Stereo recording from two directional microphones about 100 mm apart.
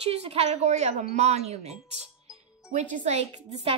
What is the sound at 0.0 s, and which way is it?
A woman's voice, 90° right.